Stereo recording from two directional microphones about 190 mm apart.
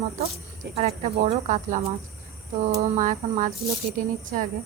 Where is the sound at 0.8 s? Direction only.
35° right (ahead or behind).